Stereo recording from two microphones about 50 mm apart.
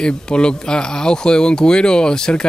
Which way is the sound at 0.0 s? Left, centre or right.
Centre.